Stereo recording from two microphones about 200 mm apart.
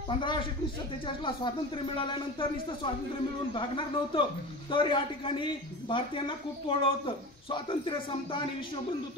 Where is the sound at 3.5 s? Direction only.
25° left (ahead or behind).